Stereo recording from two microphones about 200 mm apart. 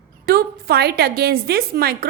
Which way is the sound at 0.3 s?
50° right (ahead or behind).